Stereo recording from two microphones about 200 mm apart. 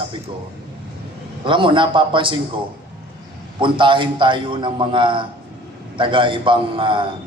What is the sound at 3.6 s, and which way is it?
A man's voice, 25° right (ahead or behind).